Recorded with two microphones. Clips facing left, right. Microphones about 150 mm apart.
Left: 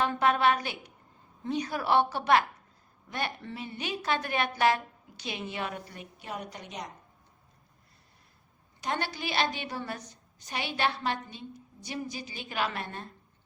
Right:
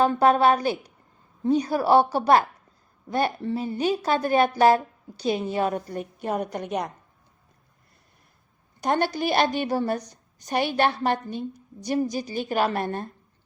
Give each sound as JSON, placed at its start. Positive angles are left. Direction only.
{"t": 0.0, "sound": "a woman's voice", "side_deg": -35}
{"t": 8.8, "sound": "a woman's voice", "side_deg": -45}